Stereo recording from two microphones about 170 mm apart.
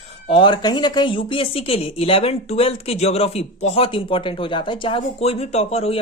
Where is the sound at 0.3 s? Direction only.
30° left (ahead or behind).